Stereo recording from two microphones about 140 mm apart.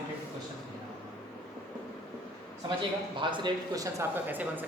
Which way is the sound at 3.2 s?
35° right (ahead or behind).